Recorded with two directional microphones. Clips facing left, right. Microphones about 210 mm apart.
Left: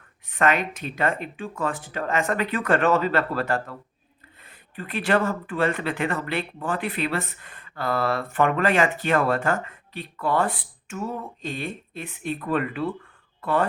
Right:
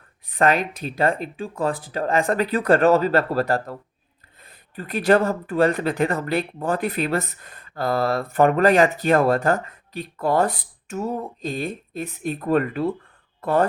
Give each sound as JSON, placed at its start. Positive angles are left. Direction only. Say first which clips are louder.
{"t": 0.3, "sound": "speech", "louder": "right 3 dB", "side_deg": -35}